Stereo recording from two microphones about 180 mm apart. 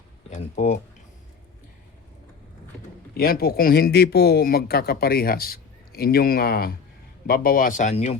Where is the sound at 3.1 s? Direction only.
55° left (ahead or behind).